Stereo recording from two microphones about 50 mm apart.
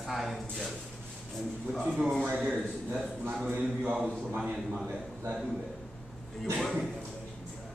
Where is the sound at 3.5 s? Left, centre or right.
Right.